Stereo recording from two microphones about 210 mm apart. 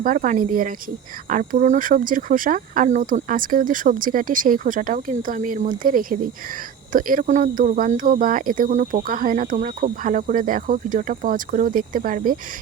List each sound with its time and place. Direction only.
0.0 s speech: 40° right (ahead or behind)